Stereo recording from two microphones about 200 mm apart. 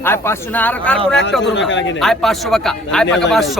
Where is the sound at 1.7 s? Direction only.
65° left (ahead or behind).